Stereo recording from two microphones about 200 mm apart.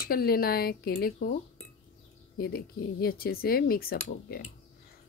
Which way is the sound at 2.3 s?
50° left (ahead or behind).